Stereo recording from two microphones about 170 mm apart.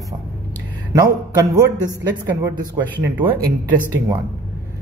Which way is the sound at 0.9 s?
20° right (ahead or behind).